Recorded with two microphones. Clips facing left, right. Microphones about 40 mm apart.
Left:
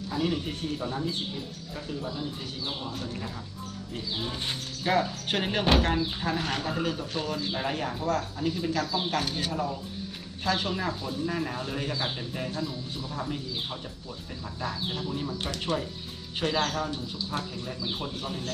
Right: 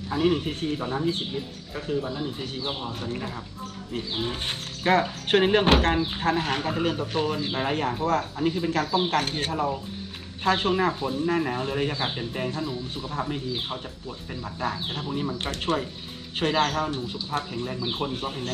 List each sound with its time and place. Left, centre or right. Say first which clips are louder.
0.1 s speech: right 6 dB; right
16.9 s speech: right 4 dB; right